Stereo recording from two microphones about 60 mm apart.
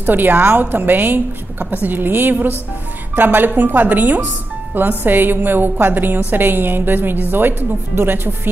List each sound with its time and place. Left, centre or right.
0.0 s a woman's voice: right